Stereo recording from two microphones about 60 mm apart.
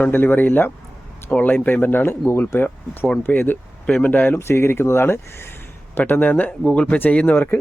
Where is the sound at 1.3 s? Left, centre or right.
Left.